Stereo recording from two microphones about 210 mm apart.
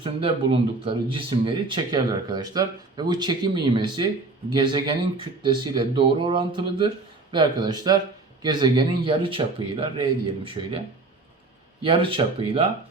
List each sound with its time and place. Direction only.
0.0 s speech: 25° right (ahead or behind)